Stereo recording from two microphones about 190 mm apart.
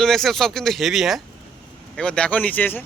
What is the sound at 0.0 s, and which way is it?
Speech, centre (ahead or behind).